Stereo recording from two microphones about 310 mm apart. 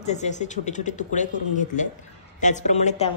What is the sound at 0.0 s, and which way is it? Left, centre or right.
Speech, left.